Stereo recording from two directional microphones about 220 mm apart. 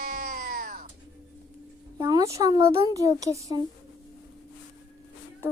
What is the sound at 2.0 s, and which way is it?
Speech, 15° right (ahead or behind).